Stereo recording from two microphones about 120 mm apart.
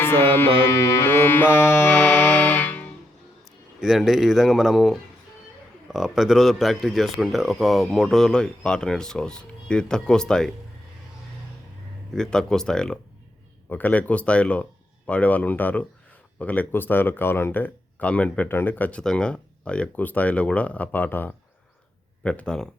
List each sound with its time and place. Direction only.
0.0 s music: 20° left (ahead or behind)
3.8 s speech: centre (ahead or behind)
12.1 s speech: 5° left (ahead or behind)